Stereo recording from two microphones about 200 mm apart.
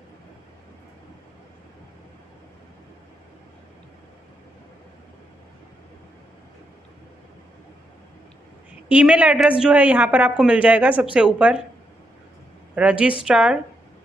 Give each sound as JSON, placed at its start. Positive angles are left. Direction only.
{"t": 8.8, "sound": "a woman's voice", "side_deg": -5}
{"t": 12.7, "sound": "a woman's voice", "side_deg": -5}